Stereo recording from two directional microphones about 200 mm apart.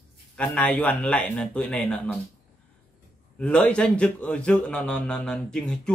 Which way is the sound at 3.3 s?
5° left (ahead or behind).